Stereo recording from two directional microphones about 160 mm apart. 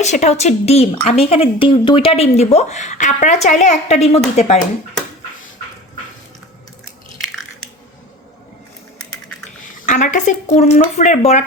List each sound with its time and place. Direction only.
0.0 s speech: 45° left (ahead or behind)
9.8 s speech: 50° left (ahead or behind)